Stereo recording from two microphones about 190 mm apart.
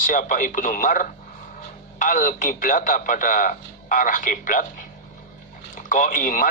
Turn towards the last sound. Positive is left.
turn(degrees=45)  # may be behind; listen again after turning